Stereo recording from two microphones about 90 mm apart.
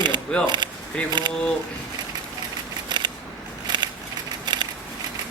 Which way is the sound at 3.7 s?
55° right (ahead or behind).